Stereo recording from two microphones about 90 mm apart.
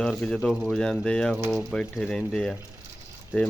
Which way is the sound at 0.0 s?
5° left (ahead or behind).